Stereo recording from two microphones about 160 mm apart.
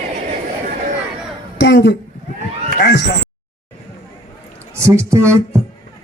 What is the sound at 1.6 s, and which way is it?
A woman's voice, 90° left.